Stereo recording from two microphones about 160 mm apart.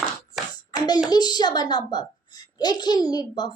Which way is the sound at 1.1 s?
25° left (ahead or behind).